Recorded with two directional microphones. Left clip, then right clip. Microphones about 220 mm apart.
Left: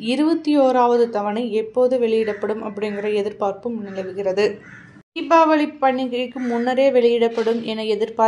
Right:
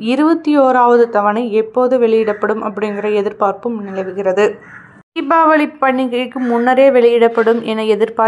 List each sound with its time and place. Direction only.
0.1 s a woman's voice: 20° right (ahead or behind)
6.3 s a woman's voice: 40° right (ahead or behind)
6.6 s a woman's voice: 15° right (ahead or behind)